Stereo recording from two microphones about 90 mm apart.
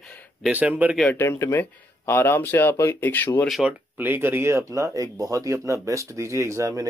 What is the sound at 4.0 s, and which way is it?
A man's voice, 25° right (ahead or behind).